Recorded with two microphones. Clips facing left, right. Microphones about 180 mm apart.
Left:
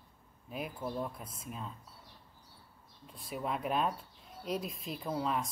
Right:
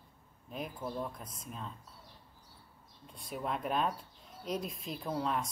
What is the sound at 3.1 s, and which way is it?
Speech, centre (ahead or behind).